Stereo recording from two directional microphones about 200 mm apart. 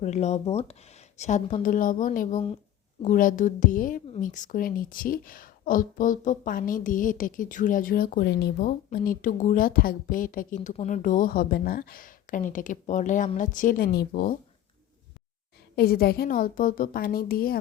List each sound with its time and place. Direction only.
0.0 s a woman's voice: 35° left (ahead or behind)
15.7 s a woman's voice: 50° left (ahead or behind)